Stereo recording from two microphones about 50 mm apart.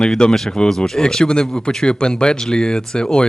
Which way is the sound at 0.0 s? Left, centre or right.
Centre.